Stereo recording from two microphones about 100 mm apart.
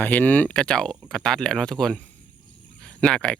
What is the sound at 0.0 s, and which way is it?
Speech, 15° left (ahead or behind).